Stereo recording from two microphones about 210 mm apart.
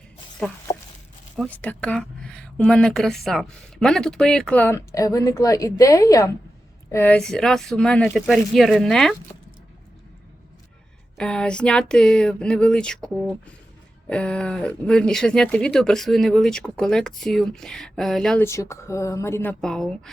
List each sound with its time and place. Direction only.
0.4 s speech: 5° left (ahead or behind)
11.2 s speech: 5° left (ahead or behind)